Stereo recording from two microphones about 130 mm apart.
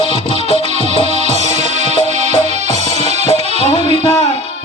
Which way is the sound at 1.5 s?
60° right (ahead or behind).